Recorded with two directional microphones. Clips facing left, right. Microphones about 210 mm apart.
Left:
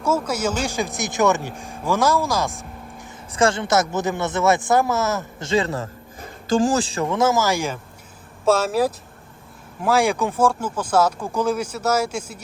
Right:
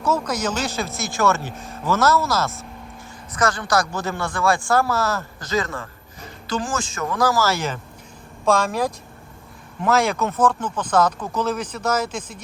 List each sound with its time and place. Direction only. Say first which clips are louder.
0.0 s speech: left 1 dB; 10° left (ahead or behind)
3.3 s a man's voice: left 3 dB; 25° left (ahead or behind); by 12.4 s 10° left (ahead or behind)